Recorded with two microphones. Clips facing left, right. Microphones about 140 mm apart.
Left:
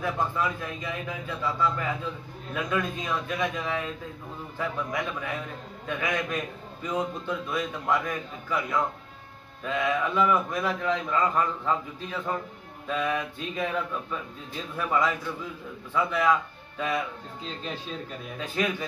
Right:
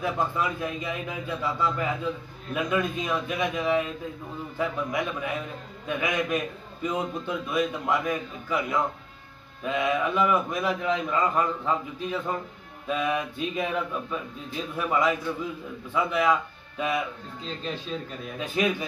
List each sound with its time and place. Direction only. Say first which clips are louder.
0.0 s a man's voice: right 1 dB; 15° right (ahead or behind)
9.7 s a man's voice: right 1 dB; 15° right (ahead or behind)
14.8 s a man's voice: right 1 dB; 15° right (ahead or behind)
18.4 s a man's voice: right 3 dB; 15° right (ahead or behind)